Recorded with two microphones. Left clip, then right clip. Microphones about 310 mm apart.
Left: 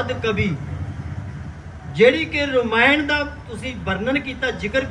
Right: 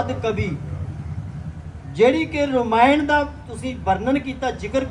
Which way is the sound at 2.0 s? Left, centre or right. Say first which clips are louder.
Left 1 dB; centre.